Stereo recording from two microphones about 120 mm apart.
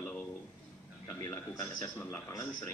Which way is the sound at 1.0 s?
20° left (ahead or behind).